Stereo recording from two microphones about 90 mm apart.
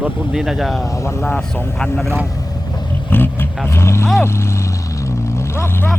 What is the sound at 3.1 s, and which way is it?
Vehicle, 25° left (ahead or behind).